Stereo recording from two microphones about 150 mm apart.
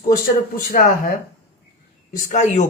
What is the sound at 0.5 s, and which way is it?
Speech, 65° left (ahead or behind).